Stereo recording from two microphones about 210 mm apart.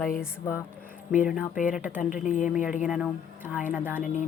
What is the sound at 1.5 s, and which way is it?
Speech, 40° left (ahead or behind).